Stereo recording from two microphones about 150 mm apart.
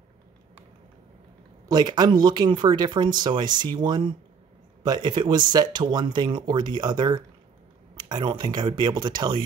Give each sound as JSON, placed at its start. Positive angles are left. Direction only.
{"t": 1.7, "sound": "speech", "side_deg": -30}